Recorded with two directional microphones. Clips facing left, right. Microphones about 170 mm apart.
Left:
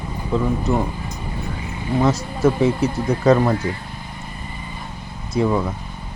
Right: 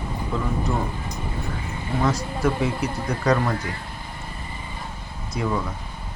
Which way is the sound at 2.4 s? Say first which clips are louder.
Left 7 dB; 25° left (ahead or behind).